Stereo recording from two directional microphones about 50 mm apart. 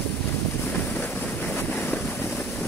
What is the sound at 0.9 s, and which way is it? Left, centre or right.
Vehicle, left.